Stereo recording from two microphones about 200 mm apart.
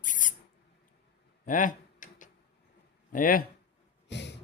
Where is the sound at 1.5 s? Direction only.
40° left (ahead or behind).